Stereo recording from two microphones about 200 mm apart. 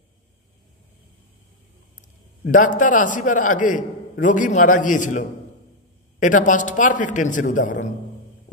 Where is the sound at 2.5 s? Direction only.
40° left (ahead or behind).